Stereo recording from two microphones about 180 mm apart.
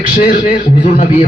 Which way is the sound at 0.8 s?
50° left (ahead or behind).